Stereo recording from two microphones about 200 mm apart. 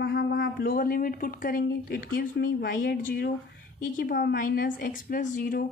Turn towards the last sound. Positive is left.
turn(degrees=45)  # may be behind; listen again after turning